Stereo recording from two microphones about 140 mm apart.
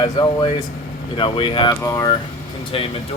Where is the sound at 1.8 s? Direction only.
20° left (ahead or behind).